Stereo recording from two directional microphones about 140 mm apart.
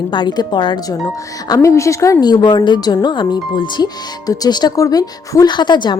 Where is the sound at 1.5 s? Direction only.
20° left (ahead or behind).